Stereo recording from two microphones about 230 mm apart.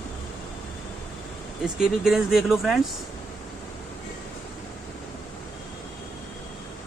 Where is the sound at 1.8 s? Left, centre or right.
Centre.